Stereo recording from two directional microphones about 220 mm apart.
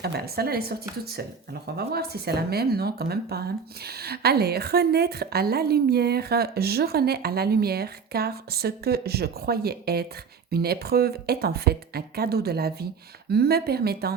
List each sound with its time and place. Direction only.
0.0 s speech: 45° right (ahead or behind)